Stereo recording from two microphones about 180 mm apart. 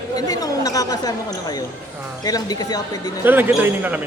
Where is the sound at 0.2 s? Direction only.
20° left (ahead or behind).